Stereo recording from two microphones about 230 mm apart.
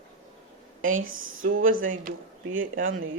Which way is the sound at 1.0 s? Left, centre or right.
Right.